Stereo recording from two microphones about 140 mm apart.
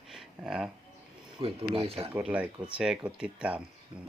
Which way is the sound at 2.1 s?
10° right (ahead or behind).